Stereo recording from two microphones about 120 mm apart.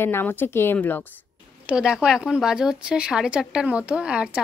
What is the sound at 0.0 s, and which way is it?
Speech, 20° left (ahead or behind).